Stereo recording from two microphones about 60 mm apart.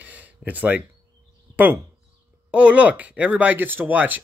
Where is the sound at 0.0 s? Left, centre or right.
Right.